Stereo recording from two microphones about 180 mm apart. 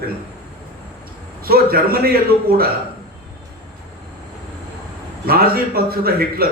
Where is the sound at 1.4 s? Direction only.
55° right (ahead or behind).